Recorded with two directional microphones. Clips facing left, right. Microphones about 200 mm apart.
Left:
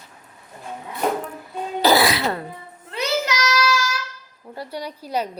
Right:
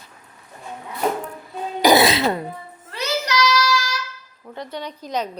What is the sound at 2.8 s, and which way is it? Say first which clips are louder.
Child singing: left 2 dB; 20° left (ahead or behind).